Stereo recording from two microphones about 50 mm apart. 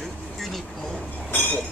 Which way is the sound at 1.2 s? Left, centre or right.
Left.